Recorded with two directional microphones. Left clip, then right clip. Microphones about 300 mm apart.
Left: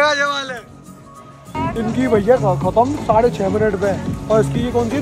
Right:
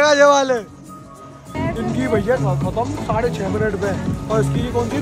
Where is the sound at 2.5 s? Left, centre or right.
Right.